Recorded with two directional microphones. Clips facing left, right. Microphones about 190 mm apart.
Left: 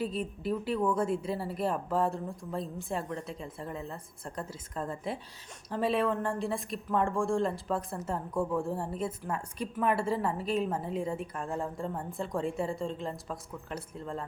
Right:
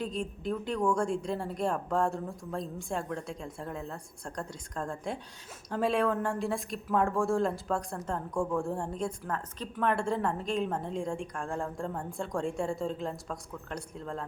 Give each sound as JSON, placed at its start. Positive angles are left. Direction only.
{"t": 0.0, "sound": "speech", "side_deg": 5}